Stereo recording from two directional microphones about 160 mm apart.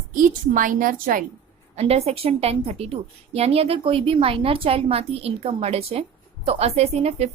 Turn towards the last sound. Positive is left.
turn(degrees=-40)  # may be behind; listen again after turning